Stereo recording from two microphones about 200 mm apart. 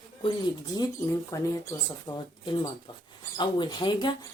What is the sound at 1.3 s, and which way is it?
Speech, 15° left (ahead or behind).